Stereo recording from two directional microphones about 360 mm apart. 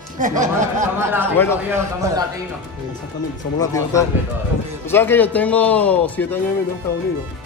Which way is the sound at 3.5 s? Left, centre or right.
Centre.